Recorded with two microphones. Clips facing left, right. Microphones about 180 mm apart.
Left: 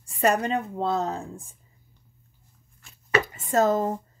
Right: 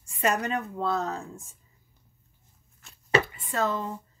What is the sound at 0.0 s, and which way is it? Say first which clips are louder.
A woman's voice: left 4 dB; 35° left (ahead or behind).